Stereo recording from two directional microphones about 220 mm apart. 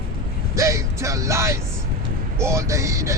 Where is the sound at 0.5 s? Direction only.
15° right (ahead or behind).